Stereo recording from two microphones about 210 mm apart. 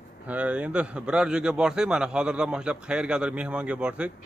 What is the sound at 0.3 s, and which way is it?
A man's voice, 5° right (ahead or behind).